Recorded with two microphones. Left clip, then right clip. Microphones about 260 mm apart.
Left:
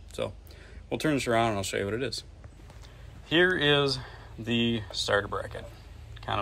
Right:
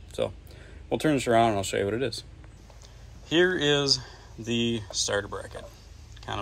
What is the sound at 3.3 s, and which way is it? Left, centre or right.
Speech, centre.